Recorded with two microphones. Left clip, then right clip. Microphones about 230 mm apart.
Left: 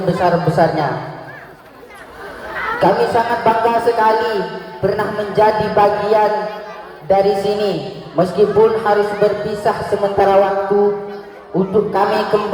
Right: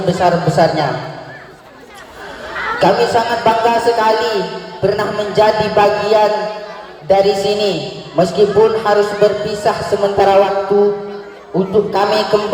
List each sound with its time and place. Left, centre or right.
0.0 s a man's voice: right
2.7 s a man's voice: right